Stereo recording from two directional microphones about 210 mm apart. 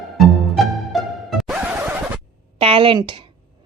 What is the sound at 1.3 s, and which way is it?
Scratch, centre (ahead or behind).